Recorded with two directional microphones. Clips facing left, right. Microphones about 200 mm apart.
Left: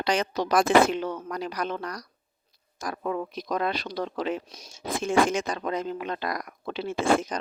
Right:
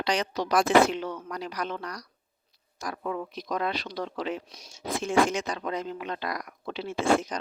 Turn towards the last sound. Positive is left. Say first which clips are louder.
# left 1 dB
turn(degrees=50)  # may be behind; listen again after turning